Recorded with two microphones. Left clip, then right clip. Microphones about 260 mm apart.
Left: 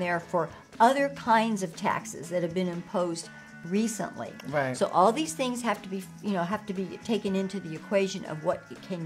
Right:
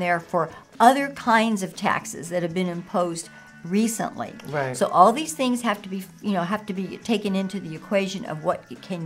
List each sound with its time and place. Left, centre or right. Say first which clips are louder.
0.0 s a woman's voice: right 5 dB; centre
4.5 s speech: right 1 dB; right
4.7 s a woman's voice: right 7 dB; left